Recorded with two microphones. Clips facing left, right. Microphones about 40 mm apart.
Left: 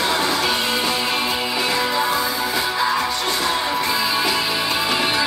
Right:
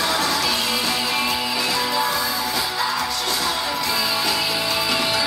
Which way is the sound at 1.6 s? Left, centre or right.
Left.